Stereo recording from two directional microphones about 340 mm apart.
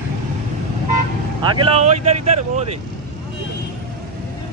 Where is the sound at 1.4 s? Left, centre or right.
Centre.